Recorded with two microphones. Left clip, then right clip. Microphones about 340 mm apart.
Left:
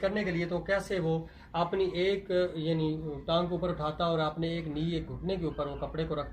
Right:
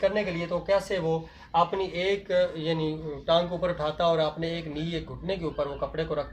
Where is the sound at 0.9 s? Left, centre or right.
Right.